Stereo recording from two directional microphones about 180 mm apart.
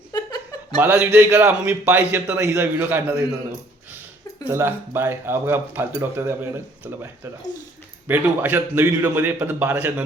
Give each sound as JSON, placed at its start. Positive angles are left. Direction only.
{"t": 0.1, "sound": "chuckle", "side_deg": 20}
{"t": 0.8, "sound": "a man's voice", "side_deg": -10}
{"t": 4.4, "sound": "a man's voice", "side_deg": -10}
{"t": 8.0, "sound": "a man's voice", "side_deg": -10}